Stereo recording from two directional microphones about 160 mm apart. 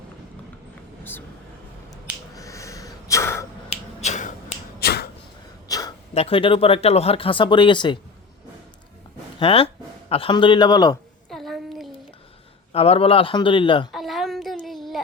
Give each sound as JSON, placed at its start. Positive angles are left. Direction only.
{"t": 2.3, "sound": "sneeze", "side_deg": 20}
{"t": 3.7, "sound": "finger snapping", "side_deg": 45}
{"t": 4.8, "sound": "a sound", "side_deg": 85}
{"t": 5.6, "sound": "gasp", "side_deg": 20}
{"t": 6.1, "sound": "speech", "side_deg": 35}
{"t": 9.4, "sound": "a man's voice", "side_deg": 35}
{"t": 11.3, "sound": "a sound", "side_deg": 0}
{"t": 12.7, "sound": "speech", "side_deg": 40}
{"t": 13.9, "sound": "child singing", "side_deg": 0}